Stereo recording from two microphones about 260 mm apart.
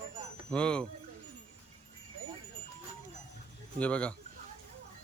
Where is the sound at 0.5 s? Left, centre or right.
Centre.